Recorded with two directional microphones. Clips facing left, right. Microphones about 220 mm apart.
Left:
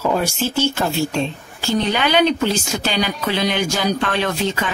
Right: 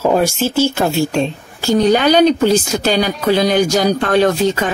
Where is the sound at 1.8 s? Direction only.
40° right (ahead or behind).